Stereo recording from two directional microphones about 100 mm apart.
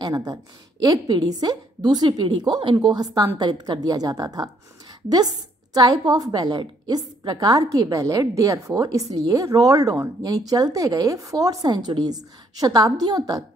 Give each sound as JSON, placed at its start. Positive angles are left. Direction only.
{"t": 0.0, "sound": "a woman's voice", "side_deg": -40}